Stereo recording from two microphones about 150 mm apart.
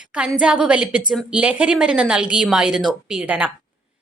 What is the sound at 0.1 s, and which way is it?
A woman's voice, 5° right (ahead or behind).